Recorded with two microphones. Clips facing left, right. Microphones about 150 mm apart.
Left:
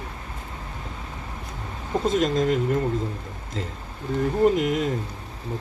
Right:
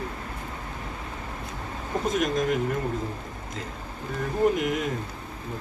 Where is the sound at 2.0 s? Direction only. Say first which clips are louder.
Left 4 dB; 25° left (ahead or behind).